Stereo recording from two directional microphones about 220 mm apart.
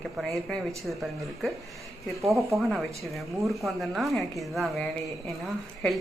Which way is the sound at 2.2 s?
Centre (ahead or behind).